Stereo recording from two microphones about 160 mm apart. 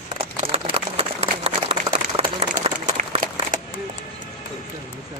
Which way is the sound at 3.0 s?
55° right (ahead or behind).